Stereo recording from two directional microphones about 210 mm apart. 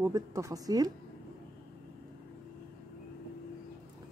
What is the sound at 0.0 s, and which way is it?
Speech, 15° right (ahead or behind).